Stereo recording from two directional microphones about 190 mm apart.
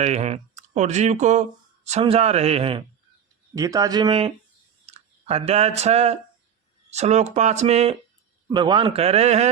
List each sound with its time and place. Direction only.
0.0 s speech: 35° right (ahead or behind)
3.5 s speech: 15° right (ahead or behind); by 7.9 s 35° right (ahead or behind)
8.4 s speech: 20° right (ahead or behind)